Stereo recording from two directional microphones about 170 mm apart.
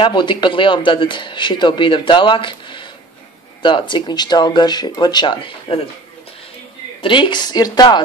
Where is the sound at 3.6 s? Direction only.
30° left (ahead or behind).